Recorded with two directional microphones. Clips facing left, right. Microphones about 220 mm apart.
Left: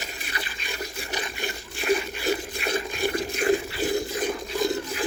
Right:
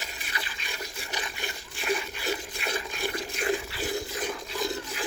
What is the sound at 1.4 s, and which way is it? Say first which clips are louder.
Water: left 5 dB; 55° left (ahead or behind).